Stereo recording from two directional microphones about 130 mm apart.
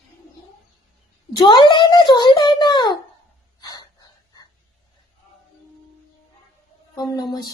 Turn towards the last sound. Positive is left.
turn(degrees=30)  # may be behind; listen again after turning